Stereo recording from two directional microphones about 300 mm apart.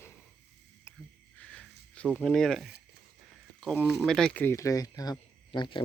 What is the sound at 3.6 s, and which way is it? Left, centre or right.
Speech, centre.